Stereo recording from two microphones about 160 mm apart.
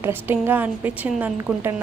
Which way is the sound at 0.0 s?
15° right (ahead or behind).